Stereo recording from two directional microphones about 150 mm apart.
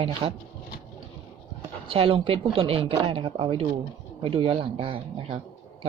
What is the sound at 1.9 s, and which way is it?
Speech, 40° right (ahead or behind).